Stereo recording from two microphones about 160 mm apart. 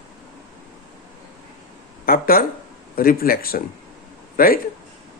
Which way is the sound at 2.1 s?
65° left (ahead or behind).